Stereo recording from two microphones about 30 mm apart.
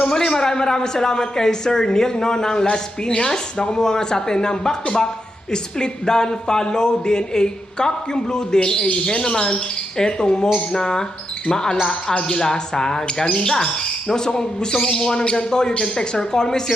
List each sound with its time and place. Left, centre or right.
0.0 s speech: left